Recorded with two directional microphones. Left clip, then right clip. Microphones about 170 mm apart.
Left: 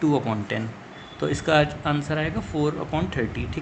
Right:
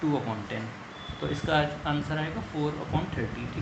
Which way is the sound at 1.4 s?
50° left (ahead or behind).